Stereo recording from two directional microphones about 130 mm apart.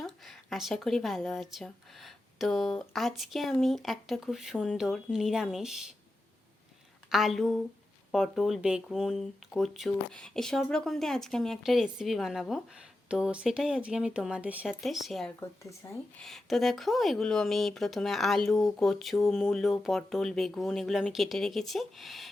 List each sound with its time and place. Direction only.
0.0 s speech: centre (ahead or behind)
7.1 s speech: centre (ahead or behind)
15.4 s speech: 20° left (ahead or behind)
16.1 s speech: centre (ahead or behind)